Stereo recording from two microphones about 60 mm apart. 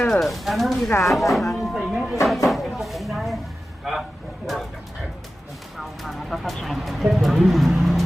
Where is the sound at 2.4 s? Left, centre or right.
Centre.